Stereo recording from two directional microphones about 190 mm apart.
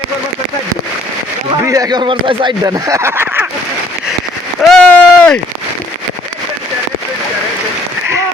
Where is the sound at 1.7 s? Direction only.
20° right (ahead or behind).